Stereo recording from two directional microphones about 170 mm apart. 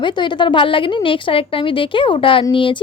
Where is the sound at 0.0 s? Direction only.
25° left (ahead or behind).